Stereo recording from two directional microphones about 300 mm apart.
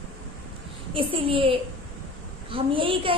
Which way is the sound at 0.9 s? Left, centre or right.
Centre.